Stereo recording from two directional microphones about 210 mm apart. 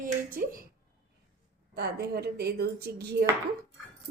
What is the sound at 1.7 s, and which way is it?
A woman's voice, 50° right (ahead or behind).